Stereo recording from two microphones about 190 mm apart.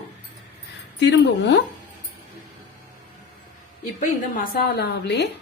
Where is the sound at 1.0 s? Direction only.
70° left (ahead or behind).